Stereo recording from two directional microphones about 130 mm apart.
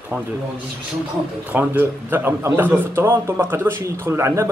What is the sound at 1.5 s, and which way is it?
A man's voice, 15° right (ahead or behind).